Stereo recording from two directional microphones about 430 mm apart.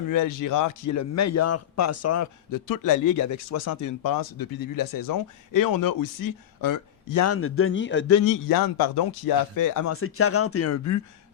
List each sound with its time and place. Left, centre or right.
0.1 s a man's voice: left
9.9 s speech: left